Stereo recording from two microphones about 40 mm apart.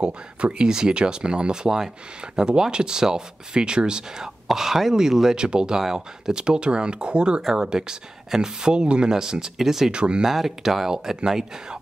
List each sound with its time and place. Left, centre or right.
0.0 s speech: right
4.5 s speech: centre
9.8 s speech: right
10.2 s speech: centre